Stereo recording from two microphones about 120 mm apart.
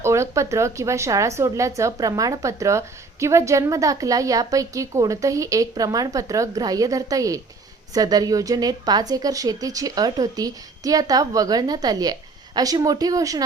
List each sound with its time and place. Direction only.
0.0 s a woman's voice: 25° right (ahead or behind)